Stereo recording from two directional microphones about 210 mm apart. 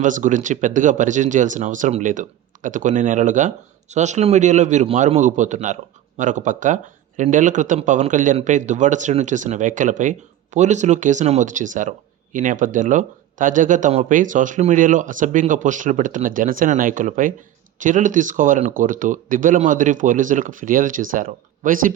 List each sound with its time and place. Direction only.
0.0 s speech: 35° right (ahead or behind)